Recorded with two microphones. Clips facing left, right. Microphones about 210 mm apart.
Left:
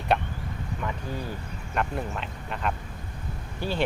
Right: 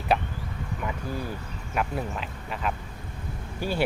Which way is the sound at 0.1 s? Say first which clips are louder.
Even; 5° right (ahead or behind).